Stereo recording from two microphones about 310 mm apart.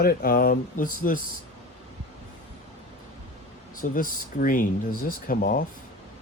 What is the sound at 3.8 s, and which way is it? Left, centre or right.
Speech, left.